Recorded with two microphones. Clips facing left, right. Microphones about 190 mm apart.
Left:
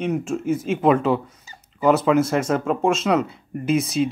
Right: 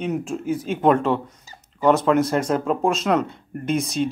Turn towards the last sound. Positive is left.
turn(degrees=5)  # may be behind; listen again after turning